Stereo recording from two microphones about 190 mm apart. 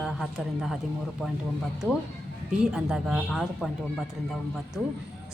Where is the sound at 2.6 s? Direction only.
5° right (ahead or behind).